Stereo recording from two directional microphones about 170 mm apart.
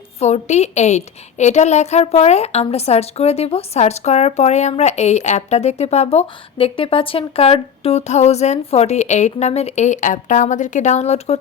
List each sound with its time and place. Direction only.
0.2 s a woman's voice: 40° left (ahead or behind)